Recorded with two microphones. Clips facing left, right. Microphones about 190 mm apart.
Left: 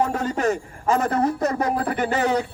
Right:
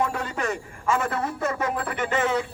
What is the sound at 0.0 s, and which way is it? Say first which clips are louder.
A man's voice: left 5 dB; 40° left (ahead or behind).